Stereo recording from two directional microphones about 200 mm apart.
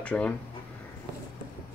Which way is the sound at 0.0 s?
5° left (ahead or behind).